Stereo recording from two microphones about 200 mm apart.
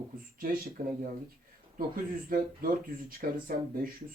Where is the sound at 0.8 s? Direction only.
45° right (ahead or behind).